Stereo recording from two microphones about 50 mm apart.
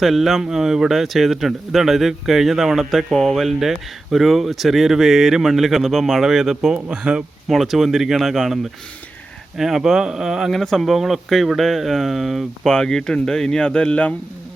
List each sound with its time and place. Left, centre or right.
0.0 s speech: centre
6.8 s speech: right
7.5 s speech: centre
9.6 s a man's voice: centre
10.5 s speech: centre
12.6 s speech: centre